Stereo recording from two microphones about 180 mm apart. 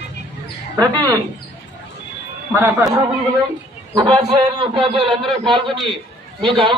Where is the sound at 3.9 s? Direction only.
25° right (ahead or behind).